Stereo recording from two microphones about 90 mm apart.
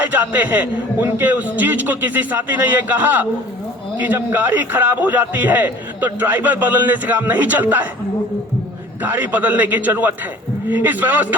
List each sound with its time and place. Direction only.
0.0 s a man's voice: 20° right (ahead or behind)
9.0 s a man's voice: 20° right (ahead or behind)